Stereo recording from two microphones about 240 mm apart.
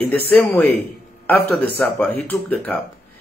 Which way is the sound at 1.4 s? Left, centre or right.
Right.